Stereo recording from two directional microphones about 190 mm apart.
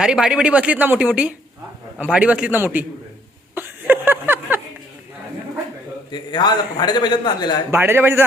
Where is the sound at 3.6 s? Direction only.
10° right (ahead or behind).